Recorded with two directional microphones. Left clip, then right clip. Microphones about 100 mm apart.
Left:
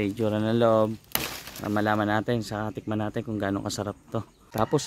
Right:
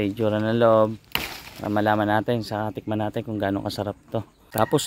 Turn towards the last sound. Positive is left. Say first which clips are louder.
# right 4 dB
turn(degrees=-20)  # may be behind; listen again after turning